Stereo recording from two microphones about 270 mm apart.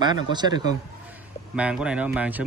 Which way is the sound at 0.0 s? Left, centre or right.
Centre.